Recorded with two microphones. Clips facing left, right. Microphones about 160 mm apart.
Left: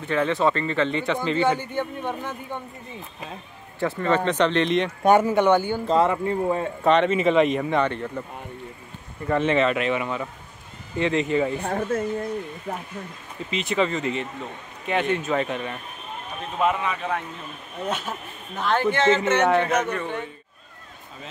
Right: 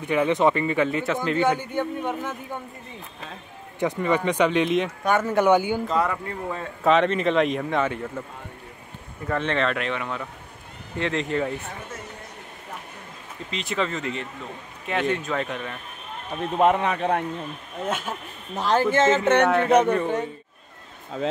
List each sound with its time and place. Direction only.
0.0 s speech: 15° right (ahead or behind)
3.8 s speech: 15° right (ahead or behind)
5.9 s speech: 25° left (ahead or behind)
6.8 s speech: centre (ahead or behind)
9.3 s speech: 5° left (ahead or behind)
11.6 s speech: 60° left (ahead or behind)
13.5 s speech: 5° left (ahead or behind)
16.5 s a man's voice: 55° right (ahead or behind)
17.8 s speech: 10° right (ahead or behind)
18.6 s a man's voice: 35° right (ahead or behind); by 19.4 s 50° right (ahead or behind)
19.4 s speech: centre (ahead or behind)
19.7 s a man's voice: 30° right (ahead or behind)